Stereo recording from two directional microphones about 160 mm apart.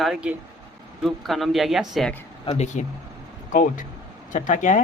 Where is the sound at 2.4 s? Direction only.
45° left (ahead or behind).